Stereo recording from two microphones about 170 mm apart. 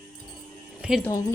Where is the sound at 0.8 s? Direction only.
5° right (ahead or behind).